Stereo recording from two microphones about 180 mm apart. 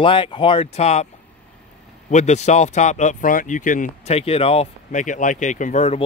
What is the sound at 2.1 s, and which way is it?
Speech, 40° left (ahead or behind).